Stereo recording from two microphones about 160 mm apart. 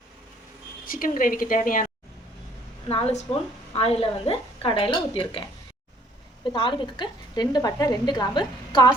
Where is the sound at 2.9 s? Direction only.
40° left (ahead or behind).